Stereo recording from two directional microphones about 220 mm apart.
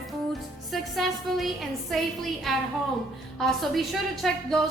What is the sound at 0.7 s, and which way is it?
A woman's voice, centre (ahead or behind).